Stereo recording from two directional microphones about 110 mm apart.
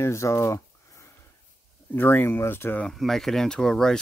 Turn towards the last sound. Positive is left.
turn(degrees=5)  # may be behind; listen again after turning